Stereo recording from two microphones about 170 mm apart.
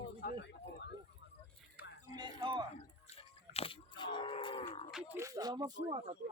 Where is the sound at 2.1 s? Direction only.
25° right (ahead or behind).